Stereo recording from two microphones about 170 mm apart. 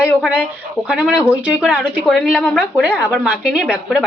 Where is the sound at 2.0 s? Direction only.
Centre (ahead or behind).